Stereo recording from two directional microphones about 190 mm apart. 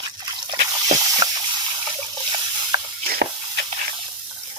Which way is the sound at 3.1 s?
55° right (ahead or behind).